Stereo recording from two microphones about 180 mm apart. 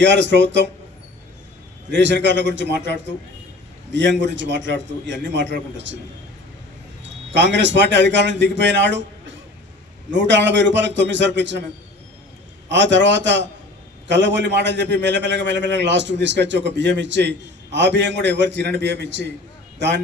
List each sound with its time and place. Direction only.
0.0 s a man's voice: 80° right
1.9 s a man's voice: 80° right
7.0 s a man's voice: 85° right
10.1 s a man's voice: 80° right
12.6 s a man's voice: 80° right